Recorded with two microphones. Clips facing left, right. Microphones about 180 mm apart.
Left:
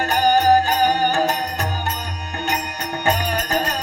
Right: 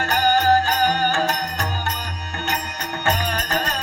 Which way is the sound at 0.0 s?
15° left (ahead or behind).